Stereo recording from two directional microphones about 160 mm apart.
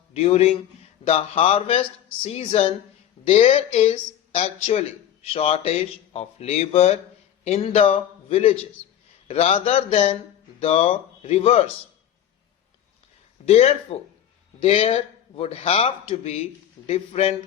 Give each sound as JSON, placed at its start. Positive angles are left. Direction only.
{"t": 0.1, "sound": "a man's voice", "side_deg": 40}
{"t": 13.4, "sound": "a man's voice", "side_deg": 40}